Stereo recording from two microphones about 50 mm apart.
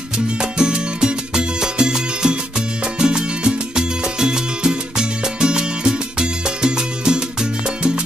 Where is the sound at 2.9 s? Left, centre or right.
Centre.